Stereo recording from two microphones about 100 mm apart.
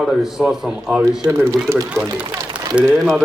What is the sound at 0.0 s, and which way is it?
A man's voice, 5° right (ahead or behind).